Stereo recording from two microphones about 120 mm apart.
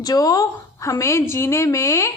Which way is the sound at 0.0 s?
30° left (ahead or behind).